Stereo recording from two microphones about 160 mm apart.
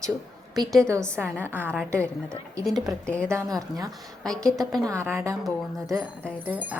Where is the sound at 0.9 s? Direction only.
15° right (ahead or behind).